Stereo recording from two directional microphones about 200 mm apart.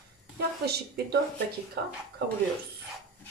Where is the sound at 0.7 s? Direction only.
55° right (ahead or behind).